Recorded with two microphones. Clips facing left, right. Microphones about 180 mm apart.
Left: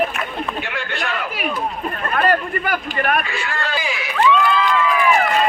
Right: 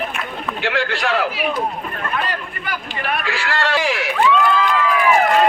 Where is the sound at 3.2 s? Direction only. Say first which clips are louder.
Right 4 dB; 90° right; by 4.1 s 70° right (ahead or behind).